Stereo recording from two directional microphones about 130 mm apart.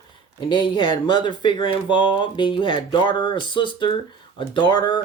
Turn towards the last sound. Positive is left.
turn(degrees=35)  # may be behind; listen again after turning